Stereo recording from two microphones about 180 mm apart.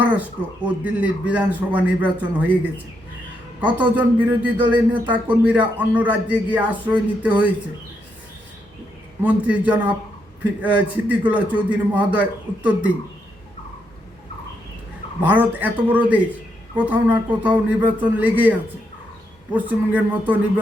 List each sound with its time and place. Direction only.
0.1 s a man's voice: 5° right (ahead or behind)
9.2 s a man's voice: 10° right (ahead or behind)
15.2 s a man's voice: 10° right (ahead or behind)
19.5 s a man's voice: 10° right (ahead or behind)